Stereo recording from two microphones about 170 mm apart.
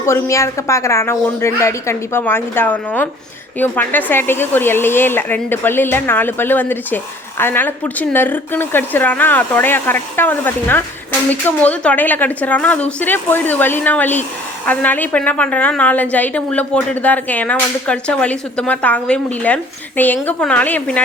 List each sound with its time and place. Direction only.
0.0 s speech: 15° left (ahead or behind)